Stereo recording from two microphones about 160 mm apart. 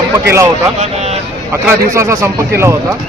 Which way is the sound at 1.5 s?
15° right (ahead or behind).